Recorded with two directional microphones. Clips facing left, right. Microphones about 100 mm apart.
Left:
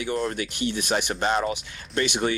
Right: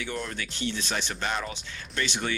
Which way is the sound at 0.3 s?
15° left (ahead or behind).